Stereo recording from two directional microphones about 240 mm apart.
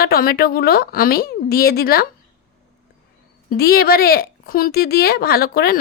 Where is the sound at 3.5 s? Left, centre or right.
Left.